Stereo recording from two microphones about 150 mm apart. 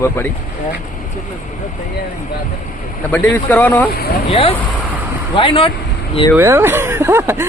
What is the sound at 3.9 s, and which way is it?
Speech, 90° left.